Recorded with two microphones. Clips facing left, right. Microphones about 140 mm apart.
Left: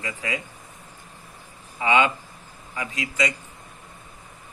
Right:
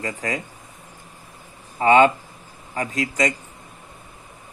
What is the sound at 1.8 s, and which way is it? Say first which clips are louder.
Speech: right 6 dB; 45° right (ahead or behind).